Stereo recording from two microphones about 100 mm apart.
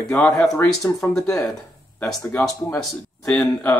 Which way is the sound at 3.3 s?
10° left (ahead or behind).